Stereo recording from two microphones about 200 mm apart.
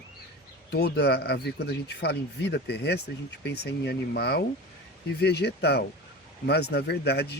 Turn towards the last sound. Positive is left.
turn(degrees=55)  # may be behind; listen again after turning